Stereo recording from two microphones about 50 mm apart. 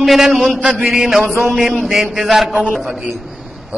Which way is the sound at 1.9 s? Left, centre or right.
Centre.